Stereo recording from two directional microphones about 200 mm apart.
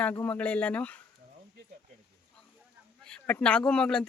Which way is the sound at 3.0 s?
5° left (ahead or behind).